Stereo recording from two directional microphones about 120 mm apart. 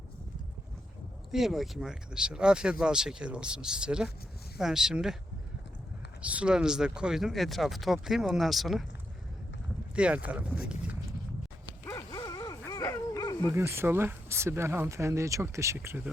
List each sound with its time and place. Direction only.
1.3 s speech: centre (ahead or behind)
6.2 s speech: 10° right (ahead or behind)
9.9 s speech: 10° right (ahead or behind)
11.9 s dog: 30° left (ahead or behind)
13.5 s speech: 20° right (ahead or behind)